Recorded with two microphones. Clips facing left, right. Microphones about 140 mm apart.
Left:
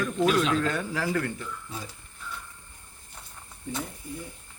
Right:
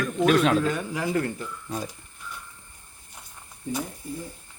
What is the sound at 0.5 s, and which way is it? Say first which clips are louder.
Speech: right 2 dB; 10° right (ahead or behind).